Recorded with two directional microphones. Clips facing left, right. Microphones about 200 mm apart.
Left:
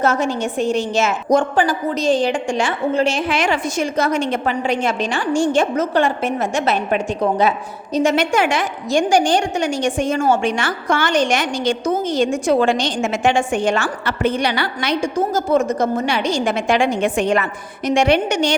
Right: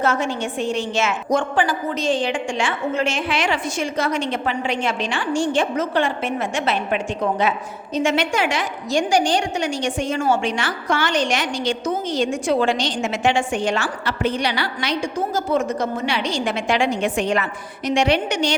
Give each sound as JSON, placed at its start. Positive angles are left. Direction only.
{"t": 0.0, "sound": "a woman's voice", "side_deg": 40}